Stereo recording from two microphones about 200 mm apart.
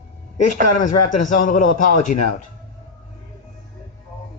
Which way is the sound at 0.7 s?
40° left (ahead or behind).